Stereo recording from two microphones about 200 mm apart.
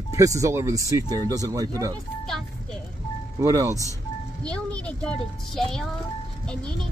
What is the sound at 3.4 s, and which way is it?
Speech, 15° right (ahead or behind).